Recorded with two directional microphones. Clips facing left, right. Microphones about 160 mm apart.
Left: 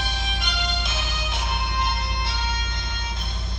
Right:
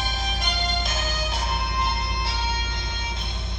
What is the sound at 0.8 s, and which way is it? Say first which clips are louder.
Music: right 3 dB; 40° right (ahead or behind).